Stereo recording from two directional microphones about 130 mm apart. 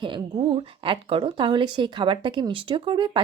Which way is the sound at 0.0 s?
40° right (ahead or behind).